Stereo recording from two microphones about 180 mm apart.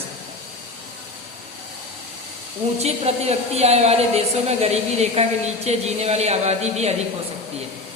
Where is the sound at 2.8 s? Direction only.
35° right (ahead or behind).